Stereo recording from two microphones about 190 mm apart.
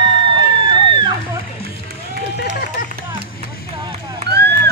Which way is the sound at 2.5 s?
50° left (ahead or behind).